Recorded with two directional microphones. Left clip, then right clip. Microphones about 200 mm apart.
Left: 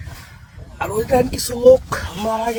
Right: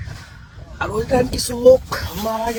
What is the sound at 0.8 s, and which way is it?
Speech, 20° left (ahead or behind).